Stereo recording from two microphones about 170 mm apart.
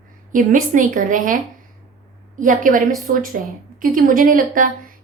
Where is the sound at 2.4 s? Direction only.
50° right (ahead or behind).